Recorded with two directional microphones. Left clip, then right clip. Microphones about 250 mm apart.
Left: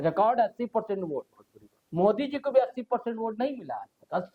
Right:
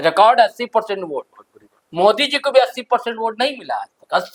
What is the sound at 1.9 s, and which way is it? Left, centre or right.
Speech, centre.